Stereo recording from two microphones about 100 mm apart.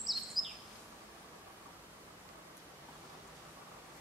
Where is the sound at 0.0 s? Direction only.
Centre (ahead or behind).